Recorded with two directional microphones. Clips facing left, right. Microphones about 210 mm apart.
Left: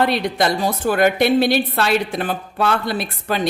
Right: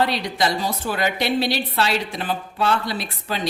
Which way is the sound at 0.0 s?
55° left (ahead or behind).